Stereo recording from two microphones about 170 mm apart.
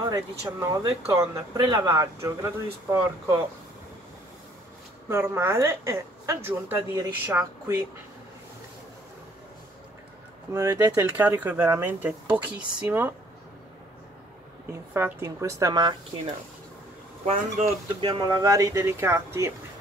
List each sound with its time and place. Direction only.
0.1 s speech: 20° right (ahead or behind)
5.1 s speech: 15° right (ahead or behind)
10.5 s speech: 20° right (ahead or behind)
14.7 s speech: 15° right (ahead or behind)
17.3 s speech: 40° right (ahead or behind)
18.0 s speech: 25° right (ahead or behind)